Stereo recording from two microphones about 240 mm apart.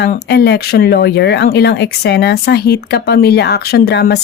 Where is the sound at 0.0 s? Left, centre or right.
Left.